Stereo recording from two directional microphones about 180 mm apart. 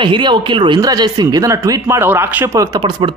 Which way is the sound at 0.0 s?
25° right (ahead or behind).